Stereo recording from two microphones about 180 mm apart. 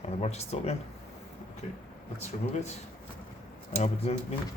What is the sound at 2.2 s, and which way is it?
Speech, 40° left (ahead or behind).